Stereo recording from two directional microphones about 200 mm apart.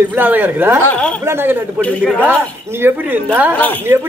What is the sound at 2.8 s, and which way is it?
Speech, 10° right (ahead or behind).